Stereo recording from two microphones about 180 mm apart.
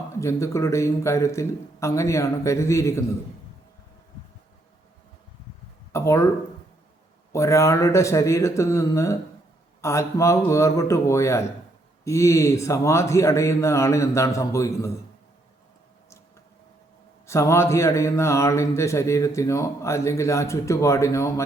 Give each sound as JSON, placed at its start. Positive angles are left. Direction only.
{"t": 0.2, "sound": "speech", "side_deg": 15}
{"t": 5.9, "sound": "speech", "side_deg": 15}
{"t": 7.3, "sound": "speech", "side_deg": 15}
{"t": 17.2, "sound": "speech", "side_deg": 15}